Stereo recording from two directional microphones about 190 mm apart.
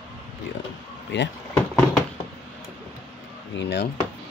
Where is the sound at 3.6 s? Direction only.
65° left (ahead or behind).